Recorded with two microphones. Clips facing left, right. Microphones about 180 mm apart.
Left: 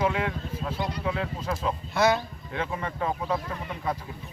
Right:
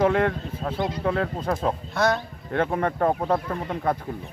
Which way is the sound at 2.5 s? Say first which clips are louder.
Right 8 dB; 55° right (ahead or behind).